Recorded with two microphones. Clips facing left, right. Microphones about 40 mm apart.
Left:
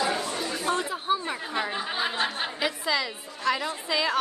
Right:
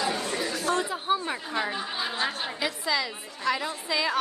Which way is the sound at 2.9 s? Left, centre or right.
Centre.